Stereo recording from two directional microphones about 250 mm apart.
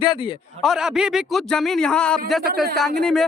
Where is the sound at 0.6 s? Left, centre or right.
Centre.